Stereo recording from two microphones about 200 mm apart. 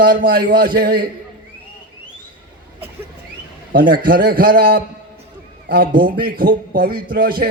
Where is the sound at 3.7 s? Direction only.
45° right (ahead or behind).